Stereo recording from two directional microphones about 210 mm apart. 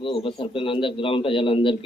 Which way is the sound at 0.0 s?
25° left (ahead or behind).